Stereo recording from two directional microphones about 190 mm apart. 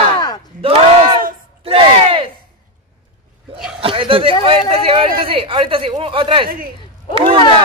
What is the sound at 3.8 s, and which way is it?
Speech, 30° right (ahead or behind).